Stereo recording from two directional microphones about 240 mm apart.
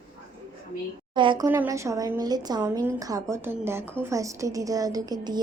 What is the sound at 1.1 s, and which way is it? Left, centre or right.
A woman's voice, centre.